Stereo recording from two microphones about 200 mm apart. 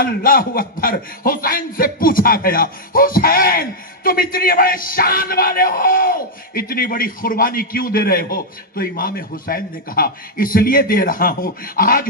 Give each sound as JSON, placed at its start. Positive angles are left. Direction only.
{"t": 0.0, "sound": "a man's voice", "side_deg": 45}